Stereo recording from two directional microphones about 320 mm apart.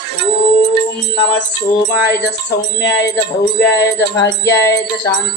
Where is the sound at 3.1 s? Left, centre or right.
Centre.